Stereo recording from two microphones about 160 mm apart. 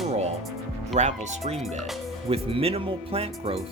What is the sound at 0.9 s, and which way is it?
Speech, 45° right (ahead or behind).